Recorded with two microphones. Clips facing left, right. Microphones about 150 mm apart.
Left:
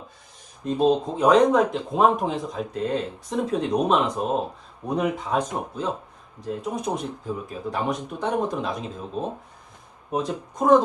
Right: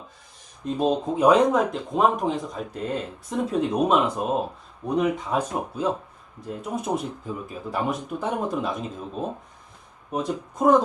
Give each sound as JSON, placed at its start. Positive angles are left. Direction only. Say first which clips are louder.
{"t": 0.8, "sound": "speech", "louder": "left 1 dB", "side_deg": -10}